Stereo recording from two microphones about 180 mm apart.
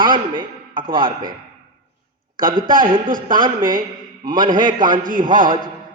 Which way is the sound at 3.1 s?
50° right (ahead or behind).